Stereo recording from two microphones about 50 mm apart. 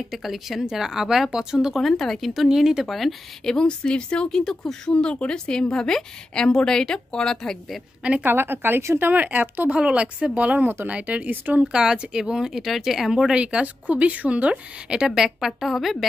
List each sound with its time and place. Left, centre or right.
0.1 s speech: centre
1.8 s speech: centre
2.9 s speech: centre
3.4 s a woman's voice: centre
4.9 s a woman's voice: left
8.2 s a woman's voice: right
9.1 s speech: right
9.8 s a woman's voice: right
11.6 s speech: centre
13.4 s a woman's voice: right; by 16.1 s centre